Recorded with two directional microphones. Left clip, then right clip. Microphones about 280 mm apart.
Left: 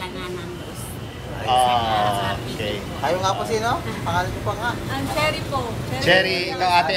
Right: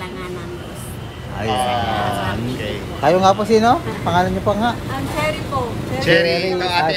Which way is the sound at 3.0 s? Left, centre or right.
Right.